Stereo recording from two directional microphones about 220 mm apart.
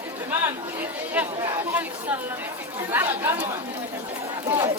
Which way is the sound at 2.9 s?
10° right (ahead or behind).